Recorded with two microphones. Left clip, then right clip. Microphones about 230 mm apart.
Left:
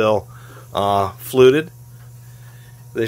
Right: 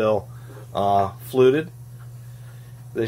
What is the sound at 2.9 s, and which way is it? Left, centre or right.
Speech, left.